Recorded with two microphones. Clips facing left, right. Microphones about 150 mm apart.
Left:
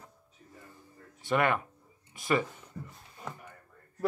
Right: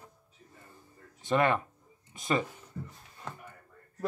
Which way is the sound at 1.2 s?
20° right (ahead or behind).